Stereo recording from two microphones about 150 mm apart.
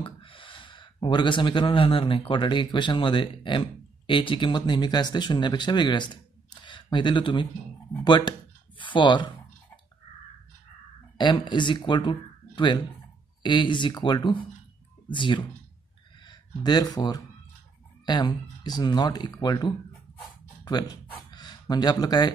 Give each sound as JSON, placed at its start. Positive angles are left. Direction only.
{"t": 0.0, "sound": "speech", "side_deg": 35}
{"t": 11.1, "sound": "speech", "side_deg": 30}